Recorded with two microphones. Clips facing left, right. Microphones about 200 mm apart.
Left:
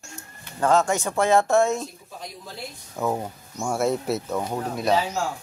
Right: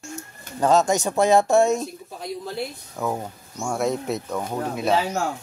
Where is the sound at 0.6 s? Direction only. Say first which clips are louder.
Right 2 dB; 15° right (ahead or behind).